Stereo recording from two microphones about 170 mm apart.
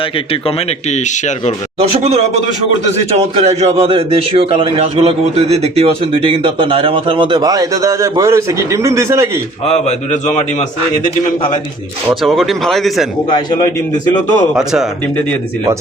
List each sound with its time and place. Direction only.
0.4 s a man's voice: 40° left (ahead or behind)
1.8 s a man's voice: 40° right (ahead or behind); by 9.4 s 15° right (ahead or behind)
9.6 s a man's voice: 40° left (ahead or behind)
12.2 s speech: centre (ahead or behind)
14.5 s speech: 5° right (ahead or behind)